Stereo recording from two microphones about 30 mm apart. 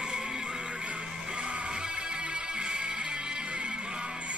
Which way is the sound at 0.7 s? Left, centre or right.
Right.